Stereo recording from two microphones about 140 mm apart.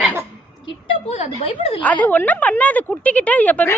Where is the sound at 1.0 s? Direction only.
50° left (ahead or behind).